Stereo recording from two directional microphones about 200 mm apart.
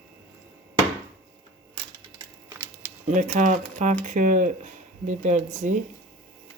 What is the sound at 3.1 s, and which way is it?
Speech, 40° right (ahead or behind).